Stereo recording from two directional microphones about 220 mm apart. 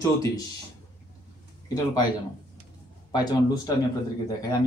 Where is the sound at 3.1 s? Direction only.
20° left (ahead or behind).